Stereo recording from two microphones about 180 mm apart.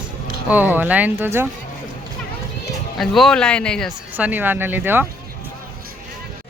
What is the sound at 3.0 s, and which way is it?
Speech, centre (ahead or behind).